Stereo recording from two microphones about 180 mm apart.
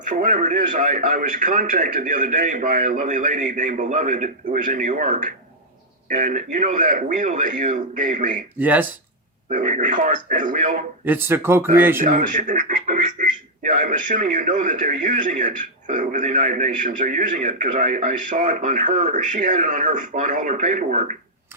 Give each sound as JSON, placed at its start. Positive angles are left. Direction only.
{"t": 0.0, "sound": "speech", "side_deg": -45}
{"t": 8.5, "sound": "speech", "side_deg": -10}
{"t": 9.5, "sound": "speech", "side_deg": -45}
{"t": 11.0, "sound": "speech", "side_deg": -10}
{"t": 12.0, "sound": "speech", "side_deg": -45}